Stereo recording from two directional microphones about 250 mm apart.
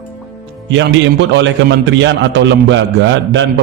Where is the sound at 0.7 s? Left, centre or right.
Right.